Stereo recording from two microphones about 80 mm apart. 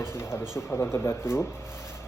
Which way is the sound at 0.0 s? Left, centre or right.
Left.